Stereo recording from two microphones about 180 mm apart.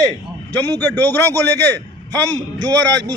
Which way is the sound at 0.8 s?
10° left (ahead or behind).